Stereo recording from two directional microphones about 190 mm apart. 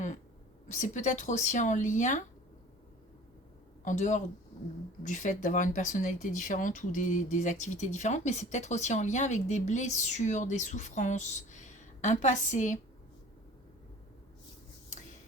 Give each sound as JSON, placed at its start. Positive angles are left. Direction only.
{"t": 0.7, "sound": "speech", "side_deg": 40}
{"t": 3.8, "sound": "speech", "side_deg": 40}